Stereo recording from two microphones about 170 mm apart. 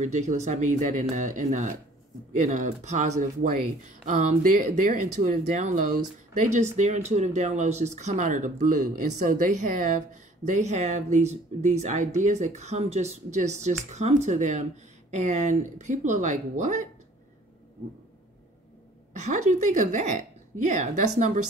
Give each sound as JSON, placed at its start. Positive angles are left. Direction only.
{"t": 0.0, "sound": "speech", "side_deg": -45}
{"t": 19.1, "sound": "speech", "side_deg": -45}